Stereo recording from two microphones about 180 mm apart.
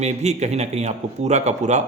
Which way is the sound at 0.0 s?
40° right (ahead or behind).